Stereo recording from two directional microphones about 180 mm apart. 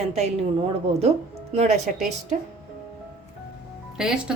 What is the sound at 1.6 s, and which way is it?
Speech, 40° right (ahead or behind).